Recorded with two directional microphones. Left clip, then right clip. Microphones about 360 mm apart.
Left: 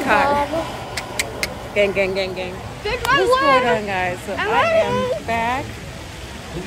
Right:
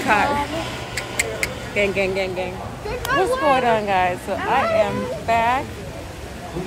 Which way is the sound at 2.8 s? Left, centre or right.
Left.